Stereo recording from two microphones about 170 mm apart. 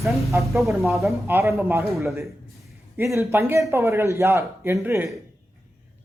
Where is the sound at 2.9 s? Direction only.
15° right (ahead or behind).